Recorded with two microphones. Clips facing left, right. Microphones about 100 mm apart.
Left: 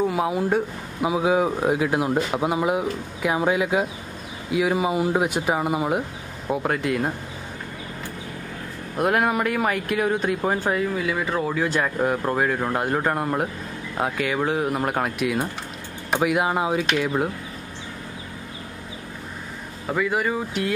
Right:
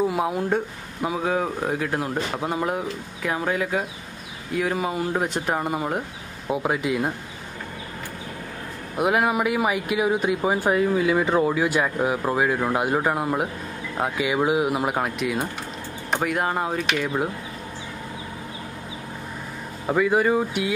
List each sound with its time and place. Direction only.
0.0 s speech: centre (ahead or behind)
8.9 s speech: 5° right (ahead or behind)
19.9 s speech: 15° right (ahead or behind)